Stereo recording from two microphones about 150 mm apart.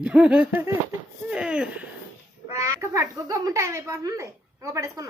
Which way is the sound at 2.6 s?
20° right (ahead or behind).